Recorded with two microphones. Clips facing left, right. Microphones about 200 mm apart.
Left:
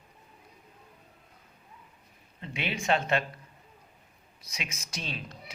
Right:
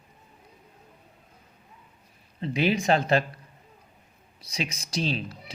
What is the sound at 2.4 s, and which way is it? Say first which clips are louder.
Speech: right 10 dB; 35° right (ahead or behind).